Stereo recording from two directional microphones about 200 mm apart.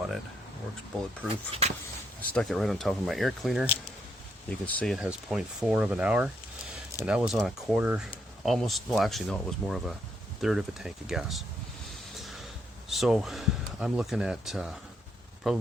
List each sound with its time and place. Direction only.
1.3 s speech: 30° right (ahead or behind)
2.3 s speech: centre (ahead or behind)
11.9 s a sound: centre (ahead or behind)
12.9 s speech: centre (ahead or behind)